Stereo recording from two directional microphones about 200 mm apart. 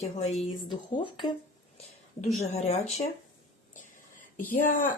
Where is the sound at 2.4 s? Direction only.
35° left (ahead or behind).